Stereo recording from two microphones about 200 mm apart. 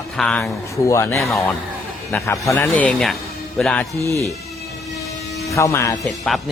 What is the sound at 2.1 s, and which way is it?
Speech, 15° left (ahead or behind).